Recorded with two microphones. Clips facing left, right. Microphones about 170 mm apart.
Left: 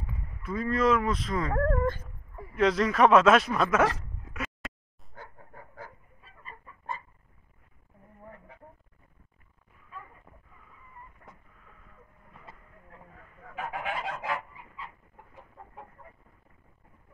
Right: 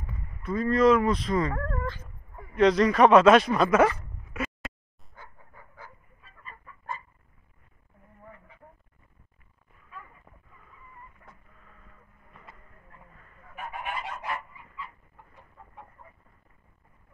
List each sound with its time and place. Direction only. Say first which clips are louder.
0.4 s speech: right 5 dB; 5° left (ahead or behind)
1.5 s speech: left 6 dB; 50° left (ahead or behind)
2.5 s speech: right 4 dB; 5° left (ahead or behind)
4.3 s a sound: right 4 dB; centre (ahead or behind)
5.1 s dog: left 4 dB; 45° left (ahead or behind)
6.4 s chicken: left 1 dB; 25° left (ahead or behind)
13.6 s goose: left 2 dB; 90° left